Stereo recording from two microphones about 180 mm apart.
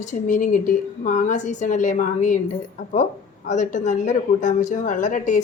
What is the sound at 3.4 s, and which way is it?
Speech, 45° left (ahead or behind).